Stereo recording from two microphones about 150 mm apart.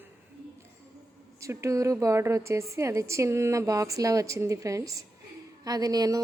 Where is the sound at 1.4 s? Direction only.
20° right (ahead or behind).